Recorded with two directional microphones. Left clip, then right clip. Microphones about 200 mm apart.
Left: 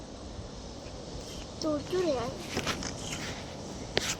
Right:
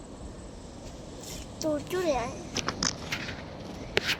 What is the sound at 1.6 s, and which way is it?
Speech, 20° right (ahead or behind).